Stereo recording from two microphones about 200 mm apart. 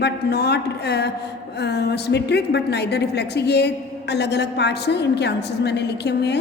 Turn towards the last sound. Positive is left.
turn(degrees=55)  # may be behind; listen again after turning